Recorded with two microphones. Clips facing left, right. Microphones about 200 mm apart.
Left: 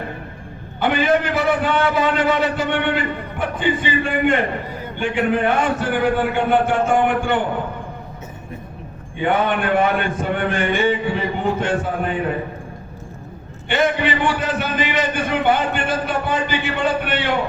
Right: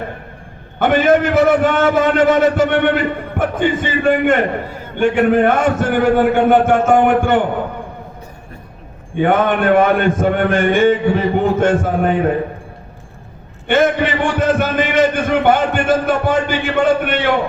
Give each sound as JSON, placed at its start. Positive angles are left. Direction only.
{"t": 0.8, "sound": "a man's voice", "side_deg": -45}
{"t": 9.1, "sound": "a man's voice", "side_deg": -45}
{"t": 13.7, "sound": "a man's voice", "side_deg": -45}